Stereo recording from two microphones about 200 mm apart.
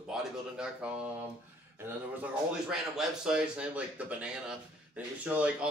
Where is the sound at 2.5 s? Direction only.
5° right (ahead or behind).